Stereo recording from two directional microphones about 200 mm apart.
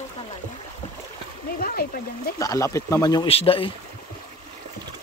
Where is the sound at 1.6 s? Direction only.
50° left (ahead or behind).